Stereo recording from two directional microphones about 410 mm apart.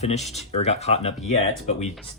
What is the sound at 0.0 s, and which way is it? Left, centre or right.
Speech, centre.